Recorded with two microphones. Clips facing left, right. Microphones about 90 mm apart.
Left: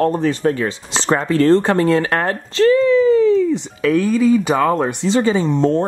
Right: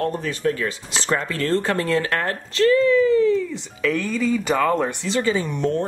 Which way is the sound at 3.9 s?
10° left (ahead or behind).